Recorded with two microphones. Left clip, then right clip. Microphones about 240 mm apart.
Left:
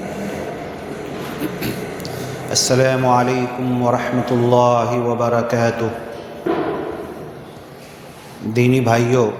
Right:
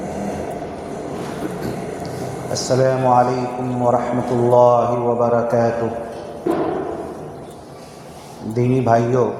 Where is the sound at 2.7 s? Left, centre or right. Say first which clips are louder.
Even; left.